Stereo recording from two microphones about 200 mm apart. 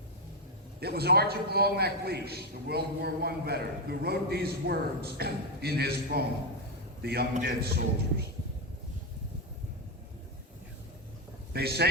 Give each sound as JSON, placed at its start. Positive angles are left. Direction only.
{"t": 0.8, "sound": "a man's voice", "side_deg": -50}
{"t": 11.5, "sound": "a man's voice", "side_deg": -50}